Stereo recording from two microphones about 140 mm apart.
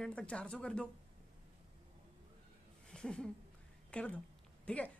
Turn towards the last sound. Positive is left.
turn(degrees=10)  # may be behind; listen again after turning